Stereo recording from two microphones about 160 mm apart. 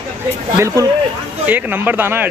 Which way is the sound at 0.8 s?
20° right (ahead or behind).